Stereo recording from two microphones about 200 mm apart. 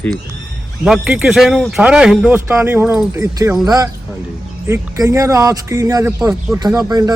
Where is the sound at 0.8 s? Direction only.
5° right (ahead or behind).